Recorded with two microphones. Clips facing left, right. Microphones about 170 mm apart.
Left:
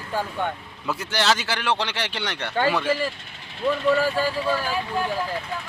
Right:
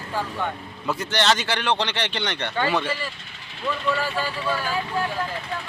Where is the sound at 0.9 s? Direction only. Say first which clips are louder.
Right 1 dB; 5° left (ahead or behind).